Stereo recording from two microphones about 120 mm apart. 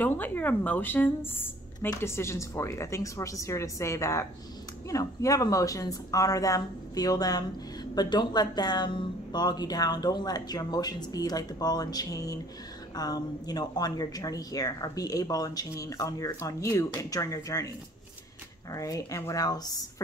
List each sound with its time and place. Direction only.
0.0 s a woman's voice: 15° left (ahead or behind)
18.7 s a woman's voice: 25° left (ahead or behind)